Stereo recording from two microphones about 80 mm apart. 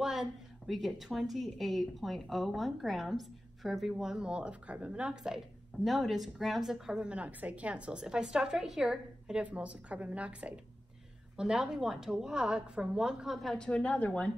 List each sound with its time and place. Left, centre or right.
0.0 s a woman's voice: centre
13.6 s a woman's voice: centre